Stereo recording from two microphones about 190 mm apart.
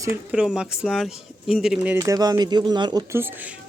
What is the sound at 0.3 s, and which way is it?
Speech, 5° right (ahead or behind).